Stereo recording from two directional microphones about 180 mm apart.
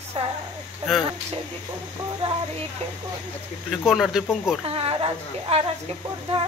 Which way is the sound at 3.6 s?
Centre (ahead or behind).